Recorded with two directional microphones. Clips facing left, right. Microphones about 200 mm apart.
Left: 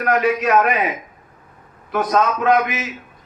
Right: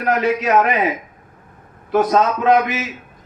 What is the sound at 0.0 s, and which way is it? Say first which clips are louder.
Speech: even; 25° right (ahead or behind).